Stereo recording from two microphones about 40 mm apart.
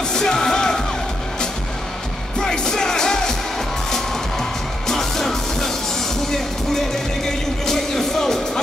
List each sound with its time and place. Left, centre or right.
0.1 s music: centre
2.4 s music: centre